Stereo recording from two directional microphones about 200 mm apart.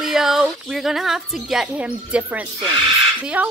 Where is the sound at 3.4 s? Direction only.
5° right (ahead or behind).